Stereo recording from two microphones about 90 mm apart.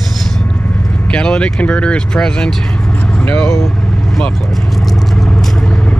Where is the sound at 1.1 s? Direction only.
10° left (ahead or behind).